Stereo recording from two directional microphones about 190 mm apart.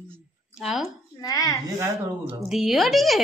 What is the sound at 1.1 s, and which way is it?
Speech, 20° left (ahead or behind).